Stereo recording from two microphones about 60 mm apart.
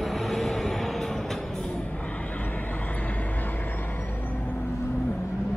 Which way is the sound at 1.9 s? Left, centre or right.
Left.